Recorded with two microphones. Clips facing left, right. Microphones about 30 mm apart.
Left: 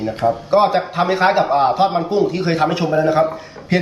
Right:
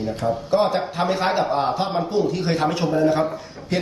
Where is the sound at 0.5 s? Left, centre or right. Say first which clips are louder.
Left 5 dB; centre.